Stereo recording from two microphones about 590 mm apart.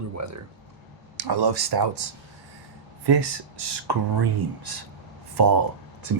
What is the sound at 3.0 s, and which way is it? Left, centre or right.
Speech, right.